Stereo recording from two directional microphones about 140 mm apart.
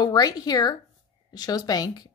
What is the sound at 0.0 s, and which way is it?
A woman's voice, 25° left (ahead or behind).